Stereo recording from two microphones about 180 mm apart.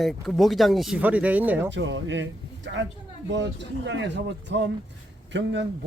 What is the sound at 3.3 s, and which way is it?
Speech, 80° right.